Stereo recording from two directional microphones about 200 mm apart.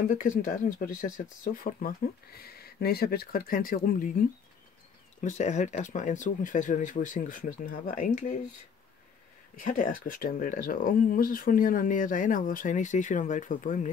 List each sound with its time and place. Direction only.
0.1 s speech: 40° left (ahead or behind)
5.2 s speech: 35° left (ahead or behind)
9.6 s speech: 40° left (ahead or behind)